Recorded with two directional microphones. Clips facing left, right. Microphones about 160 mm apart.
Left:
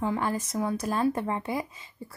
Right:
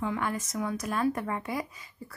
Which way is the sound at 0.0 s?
30° left (ahead or behind).